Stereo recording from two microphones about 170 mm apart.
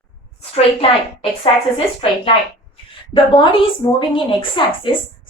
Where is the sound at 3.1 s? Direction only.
30° left (ahead or behind).